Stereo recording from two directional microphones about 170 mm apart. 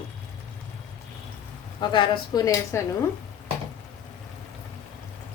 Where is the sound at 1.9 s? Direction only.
25° left (ahead or behind).